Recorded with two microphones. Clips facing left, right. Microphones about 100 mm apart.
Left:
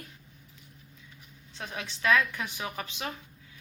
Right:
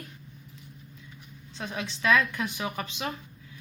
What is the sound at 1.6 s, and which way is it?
A woman's voice, 30° right (ahead or behind).